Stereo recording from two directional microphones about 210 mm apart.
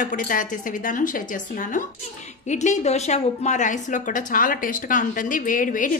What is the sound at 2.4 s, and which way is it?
A woman's voice, 35° left (ahead or behind).